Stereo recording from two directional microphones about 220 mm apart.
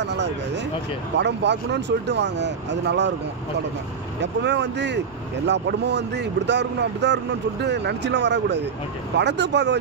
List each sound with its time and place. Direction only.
0.0 s speech: 50° right (ahead or behind)
4.2 s speech: 50° right (ahead or behind)